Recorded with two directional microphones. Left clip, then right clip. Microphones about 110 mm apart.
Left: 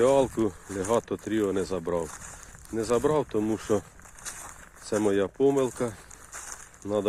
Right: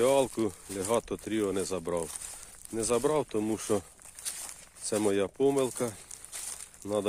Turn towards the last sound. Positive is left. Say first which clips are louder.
# left 3 dB
turn(degrees=-30)  # may be behind; listen again after turning